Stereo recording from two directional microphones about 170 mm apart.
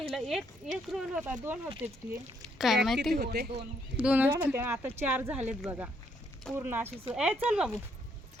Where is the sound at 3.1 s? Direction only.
65° right (ahead or behind).